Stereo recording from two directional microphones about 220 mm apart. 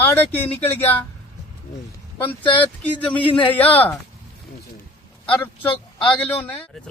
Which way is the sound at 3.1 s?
25° left (ahead or behind).